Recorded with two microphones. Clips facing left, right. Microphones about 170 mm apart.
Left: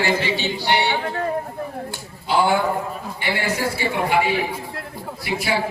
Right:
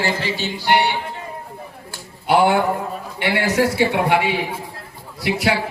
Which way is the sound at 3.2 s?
70° right (ahead or behind).